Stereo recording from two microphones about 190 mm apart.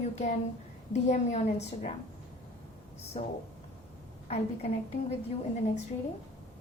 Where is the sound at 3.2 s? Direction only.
35° left (ahead or behind).